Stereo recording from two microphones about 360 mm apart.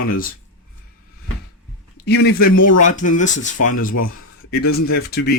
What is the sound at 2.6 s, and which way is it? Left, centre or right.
Speech, left.